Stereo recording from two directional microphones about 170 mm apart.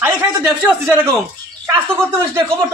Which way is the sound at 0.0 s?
10° right (ahead or behind).